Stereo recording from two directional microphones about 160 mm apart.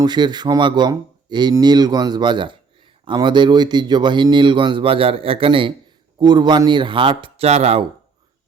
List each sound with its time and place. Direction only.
0.0 s speech: 25° right (ahead or behind)